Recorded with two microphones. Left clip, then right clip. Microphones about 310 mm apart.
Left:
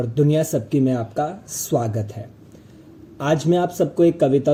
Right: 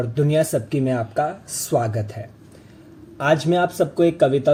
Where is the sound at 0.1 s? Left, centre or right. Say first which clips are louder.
Even; centre.